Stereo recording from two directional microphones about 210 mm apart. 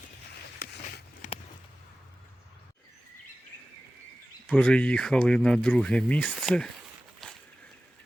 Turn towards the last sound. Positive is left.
turn(degrees=0)  # may be behind; listen again after turning